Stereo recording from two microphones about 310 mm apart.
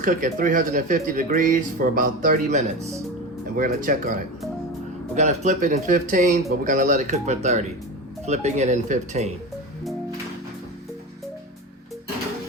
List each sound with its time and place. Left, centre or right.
0.0 s speech: right